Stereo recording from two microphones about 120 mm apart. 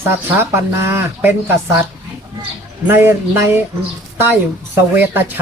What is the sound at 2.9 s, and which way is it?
Speech, 20° right (ahead or behind).